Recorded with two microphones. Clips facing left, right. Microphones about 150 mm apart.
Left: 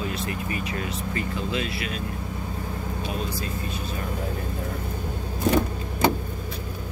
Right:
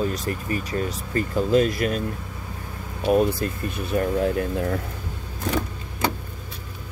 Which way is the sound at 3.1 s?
55° right (ahead or behind).